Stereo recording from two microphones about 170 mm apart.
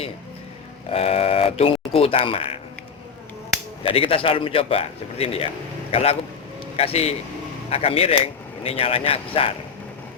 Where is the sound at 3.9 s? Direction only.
35° left (ahead or behind).